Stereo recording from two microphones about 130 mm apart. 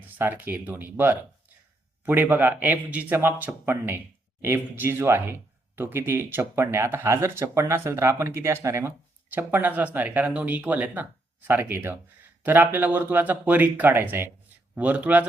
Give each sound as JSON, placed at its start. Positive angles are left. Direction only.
{"t": 0.0, "sound": "speech", "side_deg": -15}